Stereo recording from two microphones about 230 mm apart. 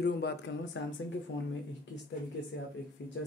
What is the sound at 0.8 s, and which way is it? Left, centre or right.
Speech, left.